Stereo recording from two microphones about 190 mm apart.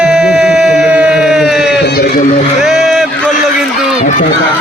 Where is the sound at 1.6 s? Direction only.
60° left (ahead or behind).